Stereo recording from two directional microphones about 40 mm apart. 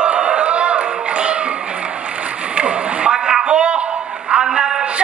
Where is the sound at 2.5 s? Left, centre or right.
Right.